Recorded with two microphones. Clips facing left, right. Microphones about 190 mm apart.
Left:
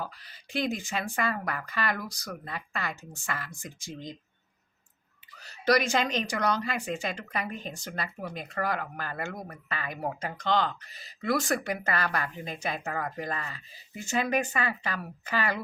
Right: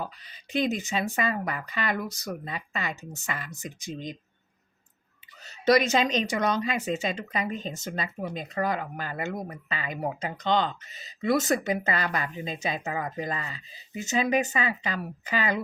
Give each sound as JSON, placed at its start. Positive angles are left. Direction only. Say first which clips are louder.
{"t": 0.0, "sound": "speech", "louder": "right 2 dB", "side_deg": -20}
{"t": 5.5, "sound": "speech", "louder": "right 3 dB", "side_deg": -20}